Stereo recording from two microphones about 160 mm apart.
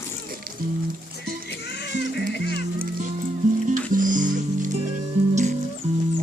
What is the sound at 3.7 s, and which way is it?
Music, 55° right (ahead or behind).